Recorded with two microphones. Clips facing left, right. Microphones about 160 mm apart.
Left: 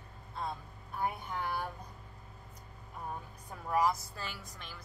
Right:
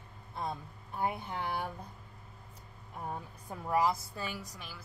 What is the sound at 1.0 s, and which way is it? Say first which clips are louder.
Speech: right 1 dB; 20° right (ahead or behind).